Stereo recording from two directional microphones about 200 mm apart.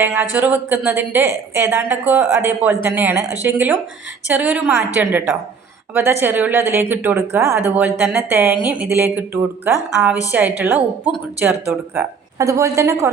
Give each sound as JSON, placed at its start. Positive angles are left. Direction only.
{"t": 0.0, "sound": "a woman's voice", "side_deg": -10}